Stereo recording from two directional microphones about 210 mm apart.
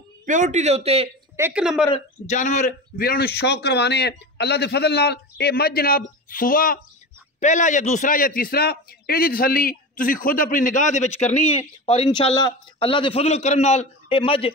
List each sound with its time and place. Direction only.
0.2 s a man's voice: 35° right (ahead or behind)
1.3 s speech: 10° right (ahead or behind)
1.9 s a man's voice: 30° left (ahead or behind)